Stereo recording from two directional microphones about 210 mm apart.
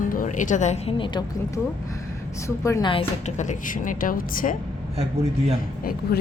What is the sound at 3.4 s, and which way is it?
A woman's voice, 35° left (ahead or behind).